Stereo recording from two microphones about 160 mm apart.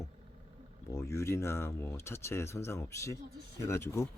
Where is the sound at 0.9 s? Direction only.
20° left (ahead or behind).